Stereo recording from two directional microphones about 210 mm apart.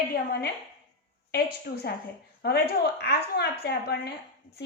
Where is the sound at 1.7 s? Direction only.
50° left (ahead or behind).